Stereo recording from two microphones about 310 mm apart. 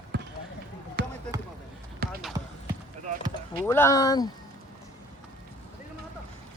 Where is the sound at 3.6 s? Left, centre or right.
Centre.